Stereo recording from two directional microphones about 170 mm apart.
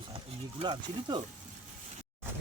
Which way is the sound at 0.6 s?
25° right (ahead or behind).